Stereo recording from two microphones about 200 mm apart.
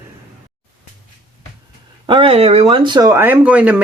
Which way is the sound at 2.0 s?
25° right (ahead or behind).